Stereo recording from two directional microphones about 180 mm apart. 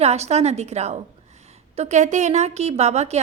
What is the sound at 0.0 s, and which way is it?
A woman's voice, 35° right (ahead or behind).